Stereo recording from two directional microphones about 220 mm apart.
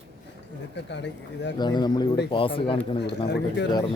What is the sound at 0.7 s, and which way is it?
Speech, 55° left (ahead or behind).